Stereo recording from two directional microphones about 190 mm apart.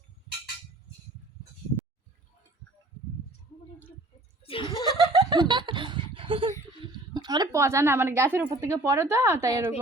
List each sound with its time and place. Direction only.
4.4 s chuckle: 25° left (ahead or behind)
4.9 s speech: 20° right (ahead or behind)